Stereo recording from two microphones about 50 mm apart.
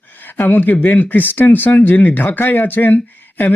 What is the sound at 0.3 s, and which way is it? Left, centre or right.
Speech, left.